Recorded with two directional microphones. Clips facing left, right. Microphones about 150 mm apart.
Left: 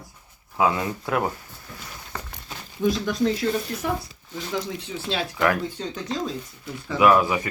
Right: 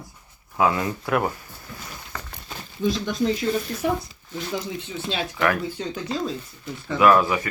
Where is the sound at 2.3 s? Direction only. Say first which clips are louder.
Right 1 dB; centre (ahead or behind).